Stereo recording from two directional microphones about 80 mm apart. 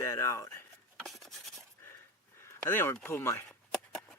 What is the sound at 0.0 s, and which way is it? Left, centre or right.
Speech, left.